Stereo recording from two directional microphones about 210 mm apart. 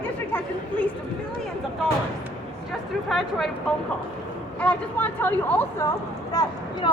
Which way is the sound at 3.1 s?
Centre (ahead or behind).